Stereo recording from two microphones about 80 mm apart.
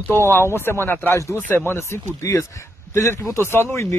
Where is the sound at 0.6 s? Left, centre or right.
Left.